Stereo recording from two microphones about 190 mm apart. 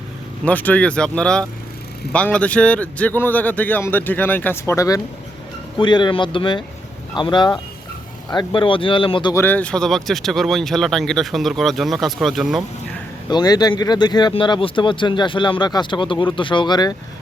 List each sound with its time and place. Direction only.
0.4 s a man's voice: 10° left (ahead or behind); by 9.3 s 25° left (ahead or behind)
9.3 s speech: 10° left (ahead or behind)
13.3 s speech: 20° left (ahead or behind)